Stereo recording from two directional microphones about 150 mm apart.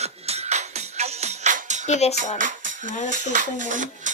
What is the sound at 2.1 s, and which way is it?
Speech, 60° right (ahead or behind).